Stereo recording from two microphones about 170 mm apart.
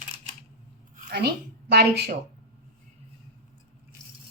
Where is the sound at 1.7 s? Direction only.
70° right (ahead or behind).